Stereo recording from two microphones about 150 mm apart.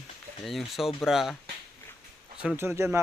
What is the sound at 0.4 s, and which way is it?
Speech, centre (ahead or behind).